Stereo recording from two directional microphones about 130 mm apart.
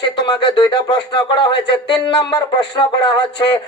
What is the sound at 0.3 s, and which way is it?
Speech, 35° left (ahead or behind).